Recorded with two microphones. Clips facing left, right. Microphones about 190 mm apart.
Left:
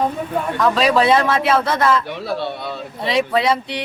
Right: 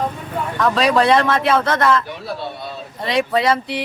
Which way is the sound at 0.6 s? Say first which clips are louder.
Even; centre (ahead or behind).